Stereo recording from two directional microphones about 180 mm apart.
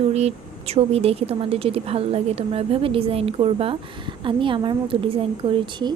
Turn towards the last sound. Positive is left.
turn(degrees=-30)  # may be behind; listen again after turning